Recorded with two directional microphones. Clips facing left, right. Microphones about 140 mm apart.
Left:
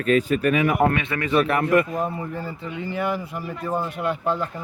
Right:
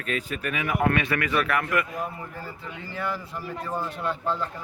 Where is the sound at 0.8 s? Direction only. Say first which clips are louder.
Left 2 dB; 25° left (ahead or behind).